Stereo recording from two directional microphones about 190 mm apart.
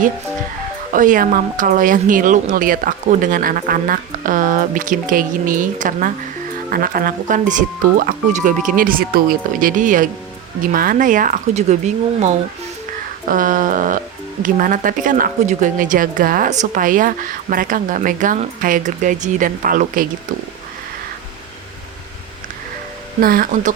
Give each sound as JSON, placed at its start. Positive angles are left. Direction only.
{"t": 0.9, "sound": "speech", "side_deg": -45}
{"t": 23.2, "sound": "speech", "side_deg": -50}